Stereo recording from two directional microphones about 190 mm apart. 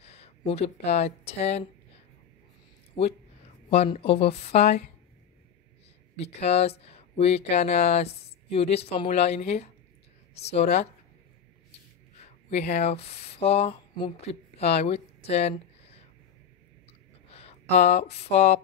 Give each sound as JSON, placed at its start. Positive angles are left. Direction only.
{"t": 0.0, "sound": "speech", "side_deg": 35}
{"t": 2.9, "sound": "speech", "side_deg": 30}
{"t": 6.1, "sound": "speech", "side_deg": 35}
{"t": 12.7, "sound": "speech", "side_deg": 35}
{"t": 17.3, "sound": "speech", "side_deg": 30}